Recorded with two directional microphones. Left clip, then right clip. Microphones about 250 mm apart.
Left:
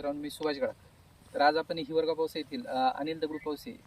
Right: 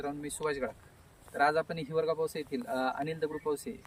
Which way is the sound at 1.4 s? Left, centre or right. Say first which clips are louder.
Left 2 dB; centre.